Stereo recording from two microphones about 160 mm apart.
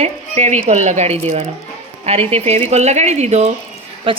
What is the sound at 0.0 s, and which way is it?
Speech, 45° right (ahead or behind).